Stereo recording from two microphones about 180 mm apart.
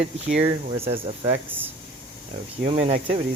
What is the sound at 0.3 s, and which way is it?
Speech, 35° right (ahead or behind).